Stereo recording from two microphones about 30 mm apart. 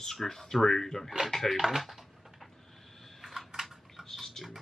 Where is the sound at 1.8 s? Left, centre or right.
Centre.